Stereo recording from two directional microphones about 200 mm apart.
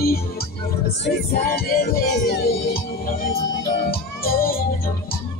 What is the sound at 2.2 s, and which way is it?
Music, 45° left (ahead or behind).